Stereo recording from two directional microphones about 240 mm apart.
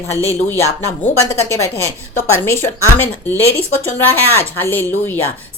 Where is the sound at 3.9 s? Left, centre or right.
Centre.